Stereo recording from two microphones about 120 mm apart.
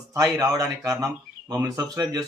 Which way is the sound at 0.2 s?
30° right (ahead or behind).